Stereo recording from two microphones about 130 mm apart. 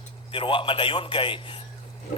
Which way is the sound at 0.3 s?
40° left (ahead or behind).